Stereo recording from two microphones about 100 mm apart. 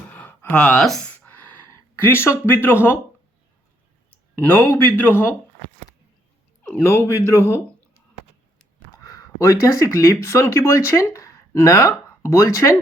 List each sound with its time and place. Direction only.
0.1 s a sound: 15° left (ahead or behind)
0.8 s speech: 5° left (ahead or behind)
2.0 s speech: 25° left (ahead or behind)
4.1 s speech: 20° left (ahead or behind)
6.8 s speech: 30° left (ahead or behind)
9.0 s speech: 35° left (ahead or behind)